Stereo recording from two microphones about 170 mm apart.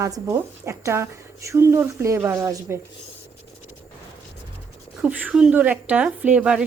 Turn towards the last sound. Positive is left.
turn(degrees=-5)  # may be behind; listen again after turning